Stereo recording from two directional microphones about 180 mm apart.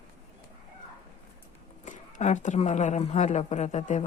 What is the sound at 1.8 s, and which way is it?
A woman's voice, 45° left (ahead or behind).